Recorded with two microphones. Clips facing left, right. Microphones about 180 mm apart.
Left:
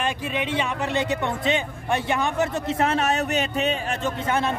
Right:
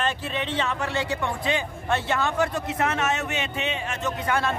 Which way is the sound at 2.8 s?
35° left (ahead or behind).